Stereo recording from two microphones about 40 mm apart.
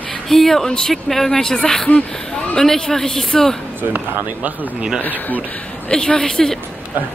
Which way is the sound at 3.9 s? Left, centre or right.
Right.